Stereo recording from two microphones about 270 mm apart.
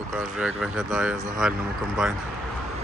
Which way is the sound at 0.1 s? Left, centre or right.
Centre.